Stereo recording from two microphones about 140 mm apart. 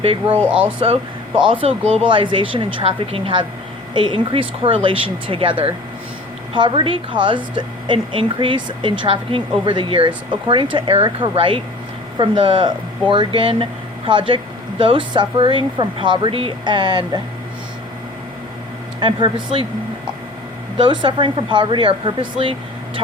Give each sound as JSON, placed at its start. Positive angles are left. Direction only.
{"t": 0.0, "sound": "a woman's voice", "side_deg": -40}
{"t": 0.4, "sound": "speech", "side_deg": -10}
{"t": 1.5, "sound": "a woman's voice", "side_deg": -40}
{"t": 18.9, "sound": "a woman's voice", "side_deg": -35}
{"t": 20.7, "sound": "a woman's voice", "side_deg": -35}